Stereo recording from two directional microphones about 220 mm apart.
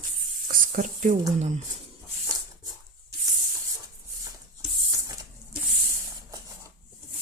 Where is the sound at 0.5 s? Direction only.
35° right (ahead or behind).